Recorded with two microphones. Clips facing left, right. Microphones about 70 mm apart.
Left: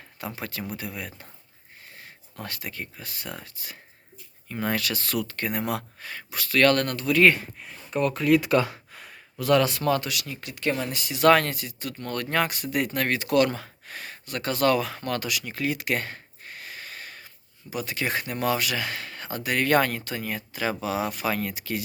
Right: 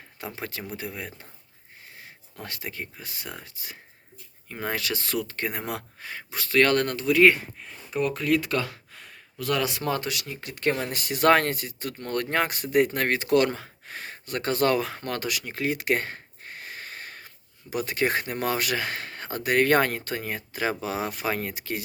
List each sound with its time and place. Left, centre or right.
0.3 s speech: right
2.4 s speech: right
7.6 s speech: centre
9.6 s speech: right
10.5 s speech: right